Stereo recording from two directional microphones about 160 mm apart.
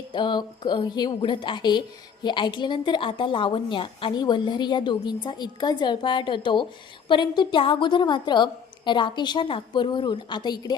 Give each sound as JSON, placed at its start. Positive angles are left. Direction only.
{"t": 0.1, "sound": "a woman's voice", "side_deg": 30}